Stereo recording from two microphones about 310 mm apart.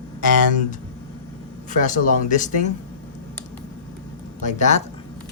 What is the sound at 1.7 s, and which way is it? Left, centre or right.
Speech, left.